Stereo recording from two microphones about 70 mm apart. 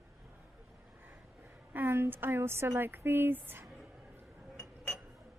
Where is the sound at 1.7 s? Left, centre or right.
Right.